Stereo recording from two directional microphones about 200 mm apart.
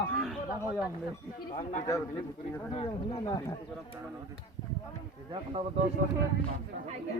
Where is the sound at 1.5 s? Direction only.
40° left (ahead or behind).